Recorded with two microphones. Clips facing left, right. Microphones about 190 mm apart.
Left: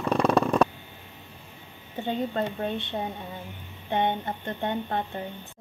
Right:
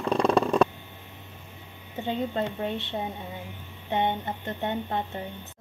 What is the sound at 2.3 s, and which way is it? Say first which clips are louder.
Speech: left 1 dB; 20° right (ahead or behind).